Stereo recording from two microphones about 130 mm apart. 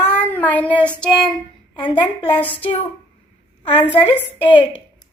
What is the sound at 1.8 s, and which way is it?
Speech, 35° left (ahead or behind).